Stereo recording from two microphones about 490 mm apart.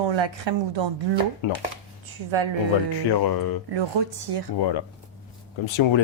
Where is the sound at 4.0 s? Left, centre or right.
Right.